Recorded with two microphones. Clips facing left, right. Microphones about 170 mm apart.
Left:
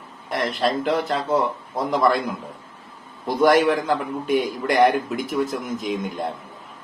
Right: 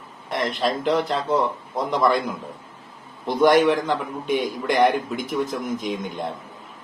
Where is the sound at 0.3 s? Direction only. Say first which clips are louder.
Left 1 dB; centre (ahead or behind).